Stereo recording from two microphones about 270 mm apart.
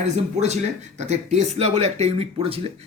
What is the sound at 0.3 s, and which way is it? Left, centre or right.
Speech, right.